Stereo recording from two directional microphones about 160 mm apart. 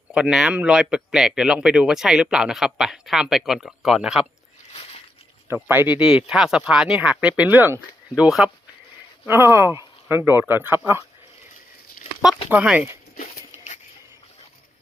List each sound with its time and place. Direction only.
0.1 s speech: 5° right (ahead or behind)
4.7 s a sound: 40° left (ahead or behind)
5.5 s speech: 10° right (ahead or behind)
12.5 s speech: 10° right (ahead or behind)